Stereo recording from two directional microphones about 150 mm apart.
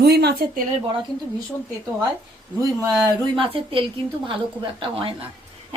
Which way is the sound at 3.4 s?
35° right (ahead or behind).